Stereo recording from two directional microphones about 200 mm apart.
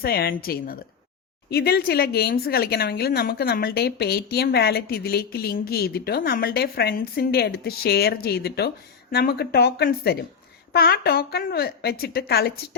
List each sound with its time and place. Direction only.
0.0 s speech: 50° left (ahead or behind)